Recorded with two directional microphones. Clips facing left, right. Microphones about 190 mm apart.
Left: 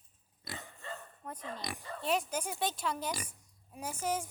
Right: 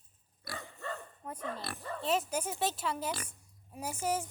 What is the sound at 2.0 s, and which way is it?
Speech, centre (ahead or behind).